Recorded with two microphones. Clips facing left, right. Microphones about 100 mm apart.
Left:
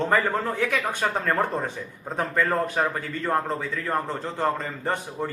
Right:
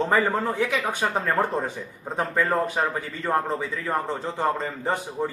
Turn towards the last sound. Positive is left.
turn(degrees=-10)  # may be behind; listen again after turning